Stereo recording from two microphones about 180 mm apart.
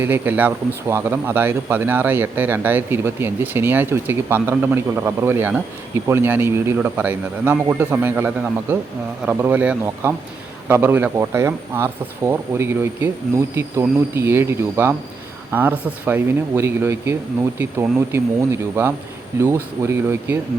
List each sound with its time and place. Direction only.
0.0 s speech: 10° right (ahead or behind)